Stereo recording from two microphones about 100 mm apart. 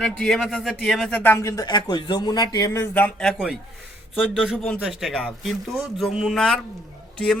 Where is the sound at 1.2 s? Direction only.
20° left (ahead or behind); by 2.8 s 40° left (ahead or behind).